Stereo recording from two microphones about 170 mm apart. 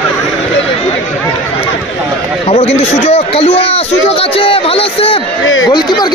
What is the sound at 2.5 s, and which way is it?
A man's voice, 35° left (ahead or behind).